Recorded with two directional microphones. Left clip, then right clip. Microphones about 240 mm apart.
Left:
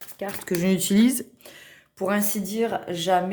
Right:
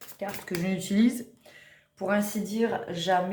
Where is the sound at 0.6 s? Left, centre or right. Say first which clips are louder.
Left 5 dB; left.